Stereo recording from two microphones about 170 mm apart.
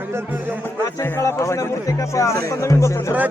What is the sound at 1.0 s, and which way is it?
Speech, 15° left (ahead or behind).